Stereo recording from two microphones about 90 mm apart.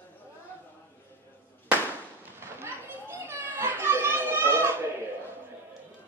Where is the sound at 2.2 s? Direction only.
25° right (ahead or behind).